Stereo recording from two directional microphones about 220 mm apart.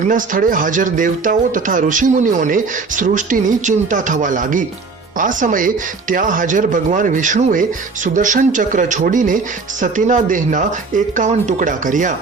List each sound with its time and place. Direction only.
0.1 s speech: 40° right (ahead or behind)